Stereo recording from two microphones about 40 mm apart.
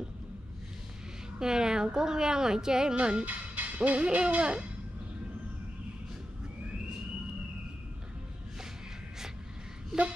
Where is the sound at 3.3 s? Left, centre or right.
Right.